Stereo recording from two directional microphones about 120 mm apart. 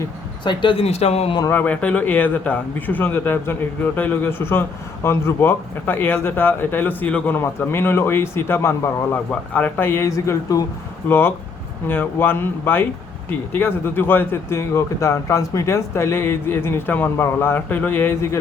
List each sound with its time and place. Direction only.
0.4 s speech: 45° left (ahead or behind)
0.9 s speech: 60° left (ahead or behind)
1.5 s speech: 15° left (ahead or behind)